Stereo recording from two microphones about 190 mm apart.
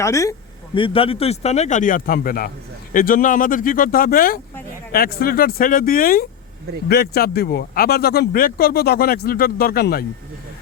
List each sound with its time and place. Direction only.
0.0 s speech: 15° left (ahead or behind); by 10.1 s 55° left (ahead or behind)